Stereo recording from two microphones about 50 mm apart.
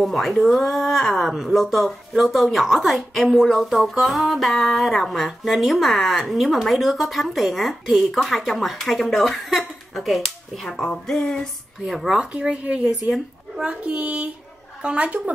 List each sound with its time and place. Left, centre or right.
0.0 s speech: centre
10.6 s speech: centre
11.1 s a sound: left
11.8 s speech: centre
12.2 s speech: right